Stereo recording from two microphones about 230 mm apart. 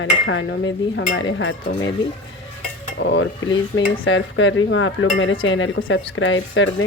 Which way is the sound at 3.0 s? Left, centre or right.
Left.